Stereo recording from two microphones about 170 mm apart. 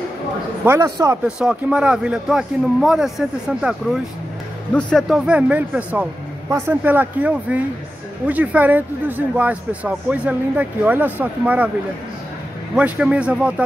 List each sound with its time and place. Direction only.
0.7 s a man's voice: 20° right (ahead or behind)
1.2 s speech: 5° right (ahead or behind)
12.7 s speech: 10° right (ahead or behind)